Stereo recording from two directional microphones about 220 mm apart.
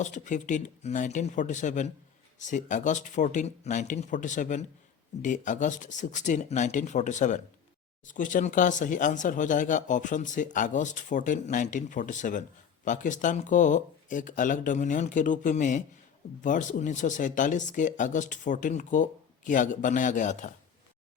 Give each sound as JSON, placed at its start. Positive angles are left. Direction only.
{"t": 0.0, "sound": "speech", "side_deg": 35}